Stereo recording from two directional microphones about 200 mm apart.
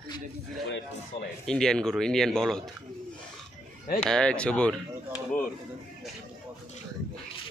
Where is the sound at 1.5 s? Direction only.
5° left (ahead or behind).